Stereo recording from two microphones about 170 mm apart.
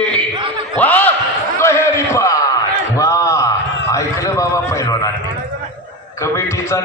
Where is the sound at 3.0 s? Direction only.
20° left (ahead or behind).